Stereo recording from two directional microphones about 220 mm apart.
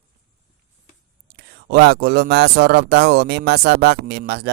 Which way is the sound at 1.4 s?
45° right (ahead or behind).